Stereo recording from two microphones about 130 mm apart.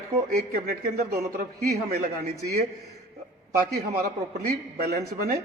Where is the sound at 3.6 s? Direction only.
90° right.